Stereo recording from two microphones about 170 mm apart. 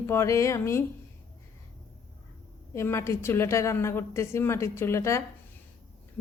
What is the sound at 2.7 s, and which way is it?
Speech, 15° left (ahead or behind).